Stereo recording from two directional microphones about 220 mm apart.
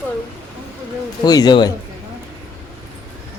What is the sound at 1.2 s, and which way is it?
Speech, 20° left (ahead or behind).